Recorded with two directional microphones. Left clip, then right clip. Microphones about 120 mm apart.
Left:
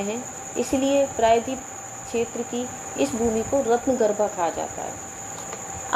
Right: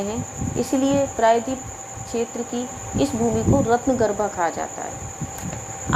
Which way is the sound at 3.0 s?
20° right (ahead or behind).